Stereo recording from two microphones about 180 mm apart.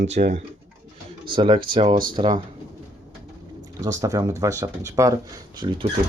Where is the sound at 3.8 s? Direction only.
20° right (ahead or behind).